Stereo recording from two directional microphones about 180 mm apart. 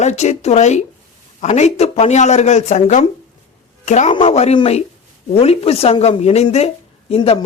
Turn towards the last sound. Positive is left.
turn(degrees=35)  # may be behind; listen again after turning